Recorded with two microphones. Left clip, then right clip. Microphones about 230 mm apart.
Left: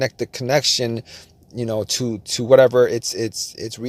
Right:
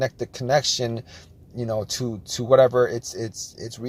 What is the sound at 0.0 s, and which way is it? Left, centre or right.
Speech, left.